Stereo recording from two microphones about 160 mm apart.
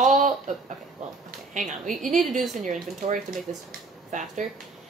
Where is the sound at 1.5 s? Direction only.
50° right (ahead or behind).